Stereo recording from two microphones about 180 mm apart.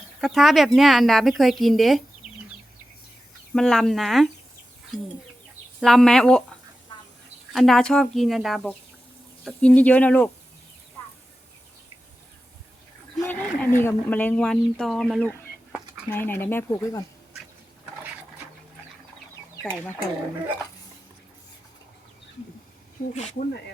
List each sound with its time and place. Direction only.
0.2 s speech: centre (ahead or behind)
3.5 s speech: 5° left (ahead or behind)
5.8 s speech: 5° left (ahead or behind)
7.5 s speech: centre (ahead or behind)
13.1 s speech: 5° left (ahead or behind)
19.6 s speech: 10° left (ahead or behind)
23.0 s speech: 55° left (ahead or behind)